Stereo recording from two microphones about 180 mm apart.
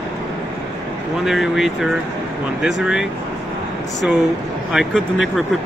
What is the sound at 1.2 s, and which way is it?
Speech, centre (ahead or behind).